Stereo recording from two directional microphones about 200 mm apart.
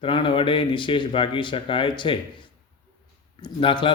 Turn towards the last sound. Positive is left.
turn(degrees=25)  # may be behind; listen again after turning